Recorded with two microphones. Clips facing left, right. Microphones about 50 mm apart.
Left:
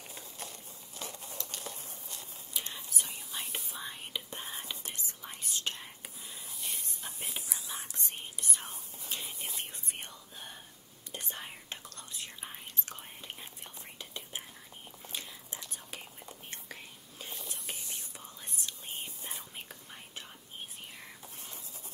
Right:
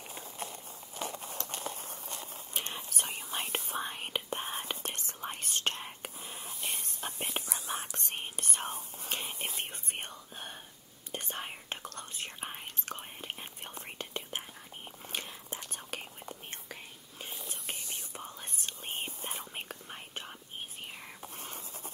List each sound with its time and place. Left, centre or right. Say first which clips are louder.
0.9 s crumpling: right 5 dB; right
1.9 s whispering: right 5 dB; right
16.0 s whispering: right 4 dB; right
21.2 s a sound: right 5 dB; right